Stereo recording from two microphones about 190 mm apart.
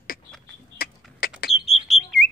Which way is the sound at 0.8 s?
50° left (ahead or behind).